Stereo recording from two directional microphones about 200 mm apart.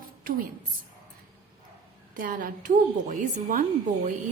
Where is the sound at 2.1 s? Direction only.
45° right (ahead or behind).